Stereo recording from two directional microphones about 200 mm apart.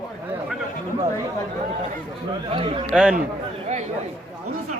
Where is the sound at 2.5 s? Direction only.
25° right (ahead or behind).